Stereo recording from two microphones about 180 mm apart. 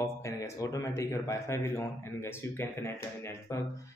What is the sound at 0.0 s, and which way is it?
Speech, 15° left (ahead or behind).